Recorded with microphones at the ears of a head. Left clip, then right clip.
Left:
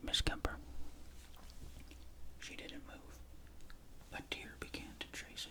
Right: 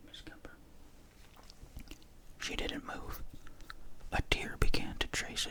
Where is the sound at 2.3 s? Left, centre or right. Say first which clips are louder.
Right 11 dB; right.